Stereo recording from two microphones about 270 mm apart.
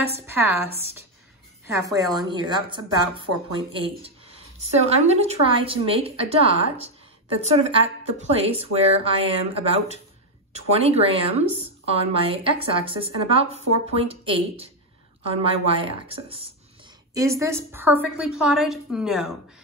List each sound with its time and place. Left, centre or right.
0.3 s a woman's voice: centre
1.7 s a woman's voice: centre
17.1 s a woman's voice: centre